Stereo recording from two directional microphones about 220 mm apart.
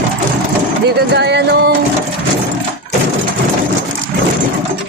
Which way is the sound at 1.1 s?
50° right (ahead or behind).